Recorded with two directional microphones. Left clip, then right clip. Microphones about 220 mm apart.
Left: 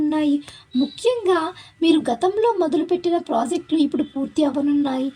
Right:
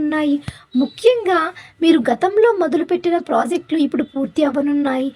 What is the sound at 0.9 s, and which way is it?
Speech, 20° right (ahead or behind).